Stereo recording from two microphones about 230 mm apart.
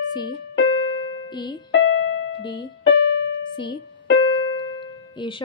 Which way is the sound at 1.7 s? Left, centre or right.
Left.